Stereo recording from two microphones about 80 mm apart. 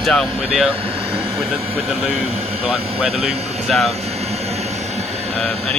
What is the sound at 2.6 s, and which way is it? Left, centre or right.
Speech, centre.